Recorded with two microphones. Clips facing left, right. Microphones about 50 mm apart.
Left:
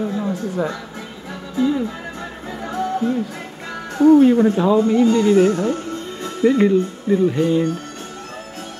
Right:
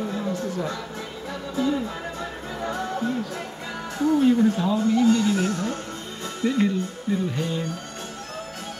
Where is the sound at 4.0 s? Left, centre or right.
Left.